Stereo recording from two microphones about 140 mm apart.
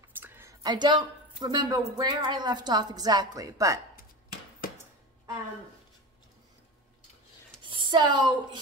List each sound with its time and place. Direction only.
0.2 s a sound: 15° right (ahead or behind)
0.6 s a woman's voice: 30° right (ahead or behind)
7.6 s speech: 35° right (ahead or behind)